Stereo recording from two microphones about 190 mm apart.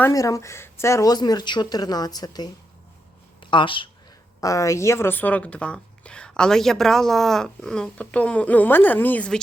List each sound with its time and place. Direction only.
0.0 s a woman's voice: 15° left (ahead or behind)